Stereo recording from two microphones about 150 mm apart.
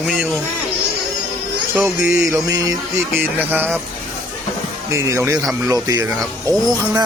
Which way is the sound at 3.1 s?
10° right (ahead or behind).